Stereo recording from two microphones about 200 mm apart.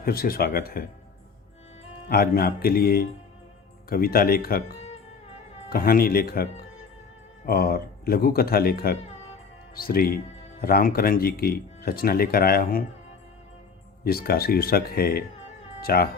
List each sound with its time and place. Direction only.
0.0 s speech: 50° left (ahead or behind)
2.0 s speech: 50° left (ahead or behind)
5.6 s speech: 50° left (ahead or behind)
14.0 s speech: 50° left (ahead or behind)